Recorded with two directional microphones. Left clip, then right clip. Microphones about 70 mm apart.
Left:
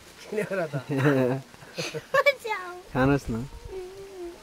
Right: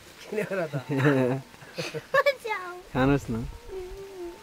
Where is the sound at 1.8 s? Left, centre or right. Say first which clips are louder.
Left 1 dB; centre.